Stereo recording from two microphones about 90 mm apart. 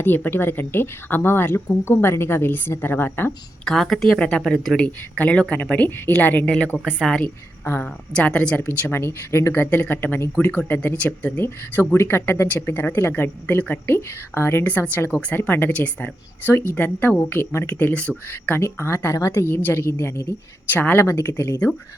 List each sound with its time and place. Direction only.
0.0 s speech: 20° left (ahead or behind)
3.7 s speech: 5° left (ahead or behind)
4.9 s speech: 15° left (ahead or behind)
7.6 s a woman's voice: 25° left (ahead or behind)
8.1 s speech: 10° left (ahead or behind)